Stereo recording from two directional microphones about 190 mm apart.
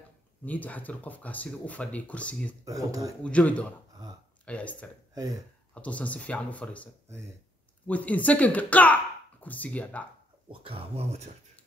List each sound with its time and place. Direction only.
0.5 s speech: 10° left (ahead or behind)
2.6 s speech: 20° right (ahead or behind)
3.3 s speech: 5° left (ahead or behind)
10.5 s speech: 30° right (ahead or behind)